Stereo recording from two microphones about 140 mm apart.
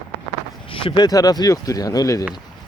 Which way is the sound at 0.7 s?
40° left (ahead or behind).